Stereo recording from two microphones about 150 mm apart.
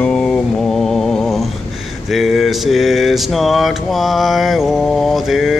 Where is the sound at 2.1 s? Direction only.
Centre (ahead or behind).